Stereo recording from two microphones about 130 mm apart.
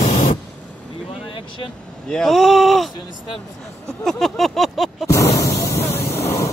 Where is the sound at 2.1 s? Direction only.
Centre (ahead or behind).